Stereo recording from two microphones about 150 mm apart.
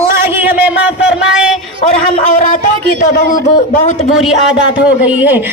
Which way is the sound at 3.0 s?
60° left (ahead or behind).